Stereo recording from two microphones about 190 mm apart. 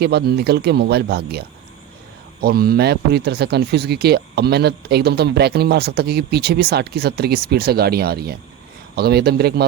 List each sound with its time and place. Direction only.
0.0 s speech: 60° right (ahead or behind)